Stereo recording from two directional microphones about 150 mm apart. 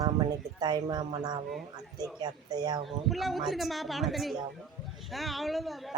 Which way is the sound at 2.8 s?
Centre (ahead or behind).